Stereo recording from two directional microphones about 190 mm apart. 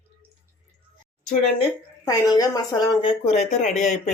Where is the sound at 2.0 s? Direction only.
20° left (ahead or behind).